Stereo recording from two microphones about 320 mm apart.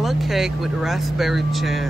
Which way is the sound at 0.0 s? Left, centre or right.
Centre.